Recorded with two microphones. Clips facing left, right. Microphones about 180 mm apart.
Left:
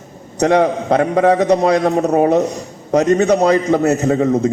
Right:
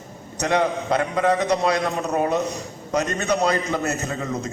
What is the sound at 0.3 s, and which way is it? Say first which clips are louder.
A man's voice: left 8 dB; 50° left (ahead or behind).